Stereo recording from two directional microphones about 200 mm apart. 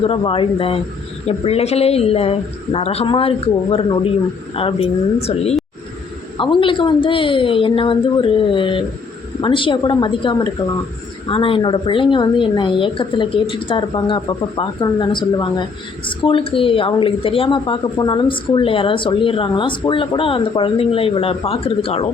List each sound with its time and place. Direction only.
0.0 s a woman's voice: 25° left (ahead or behind)